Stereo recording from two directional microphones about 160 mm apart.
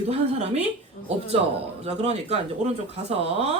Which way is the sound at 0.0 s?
45° right (ahead or behind).